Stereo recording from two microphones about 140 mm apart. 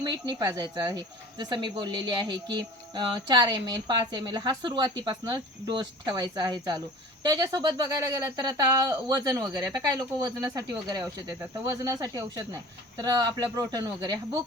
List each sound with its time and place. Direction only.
0.0 s speech: 30° right (ahead or behind)